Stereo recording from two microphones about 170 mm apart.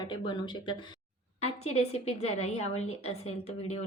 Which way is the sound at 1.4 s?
40° left (ahead or behind).